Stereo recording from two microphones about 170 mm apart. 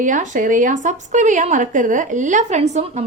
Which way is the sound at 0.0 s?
50° right (ahead or behind).